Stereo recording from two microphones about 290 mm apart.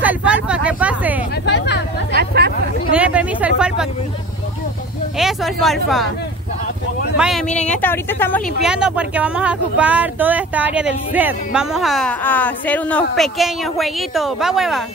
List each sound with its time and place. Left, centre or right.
0.0 s vehicle: centre
1.4 s vehicle: left
2.1 s chatter: right
2.9 s a sound: centre
5.1 s speech: centre
7.2 s speech: centre
7.5 s speech: left
7.8 s speech: centre